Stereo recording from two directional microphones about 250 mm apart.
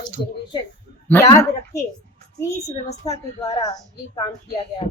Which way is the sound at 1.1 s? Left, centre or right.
Centre.